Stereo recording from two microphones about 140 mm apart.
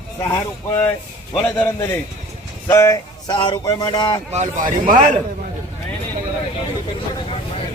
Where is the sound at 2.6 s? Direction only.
20° left (ahead or behind).